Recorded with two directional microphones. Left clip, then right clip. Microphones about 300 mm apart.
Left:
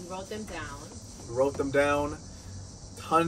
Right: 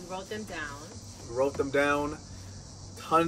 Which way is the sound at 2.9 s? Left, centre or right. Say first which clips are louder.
Even; centre.